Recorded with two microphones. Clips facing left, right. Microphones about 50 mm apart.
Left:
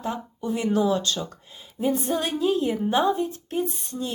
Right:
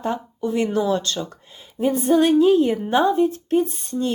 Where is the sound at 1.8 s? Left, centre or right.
Right.